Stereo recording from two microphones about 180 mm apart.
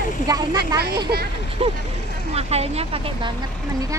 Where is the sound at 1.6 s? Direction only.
30° right (ahead or behind).